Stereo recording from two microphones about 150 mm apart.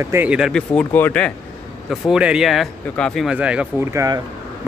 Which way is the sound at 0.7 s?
10° left (ahead or behind).